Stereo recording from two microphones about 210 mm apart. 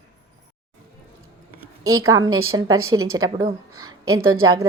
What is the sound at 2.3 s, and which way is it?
Speech, 85° right.